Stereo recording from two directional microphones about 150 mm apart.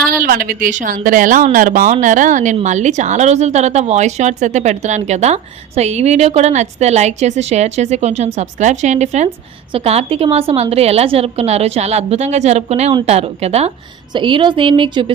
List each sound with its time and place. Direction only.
0.3 s a woman's voice: 70° right (ahead or behind); by 13.7 s 45° right (ahead or behind)
14.1 s a woman's voice: 35° right (ahead or behind)